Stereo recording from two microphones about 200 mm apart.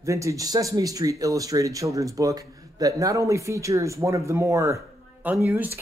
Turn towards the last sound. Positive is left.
turn(degrees=-10)  # may be behind; listen again after turning